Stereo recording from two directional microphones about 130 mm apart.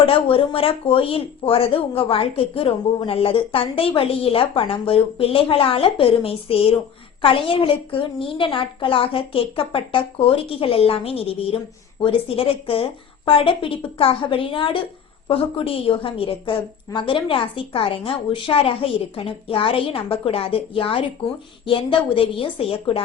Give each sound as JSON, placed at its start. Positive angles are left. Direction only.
{"t": 0.0, "sound": "speech", "side_deg": 45}